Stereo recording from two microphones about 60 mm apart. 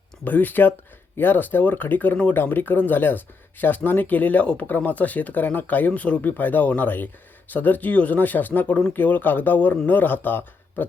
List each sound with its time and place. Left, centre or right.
0.3 s speech: left